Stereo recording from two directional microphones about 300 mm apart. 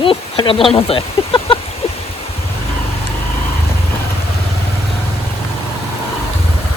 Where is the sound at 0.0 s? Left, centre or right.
Centre.